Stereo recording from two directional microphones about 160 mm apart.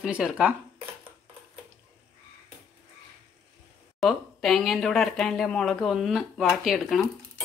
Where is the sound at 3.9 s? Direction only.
Centre (ahead or behind).